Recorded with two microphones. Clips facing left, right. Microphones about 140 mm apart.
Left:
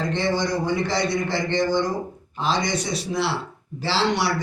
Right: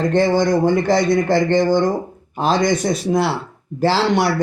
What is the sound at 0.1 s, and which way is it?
Speech, 50° right (ahead or behind).